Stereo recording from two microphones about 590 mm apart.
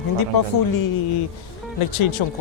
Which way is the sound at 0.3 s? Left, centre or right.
Left.